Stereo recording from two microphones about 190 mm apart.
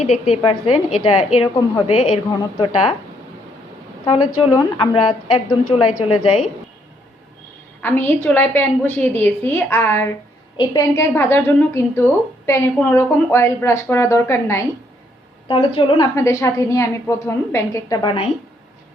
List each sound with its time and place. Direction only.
0.0 s a woman's voice: 35° left (ahead or behind)
4.0 s a woman's voice: 25° left (ahead or behind)
7.8 s a woman's voice: 10° left (ahead or behind)
15.4 s a woman's voice: 25° left (ahead or behind)
16.1 s a woman's voice: 15° left (ahead or behind)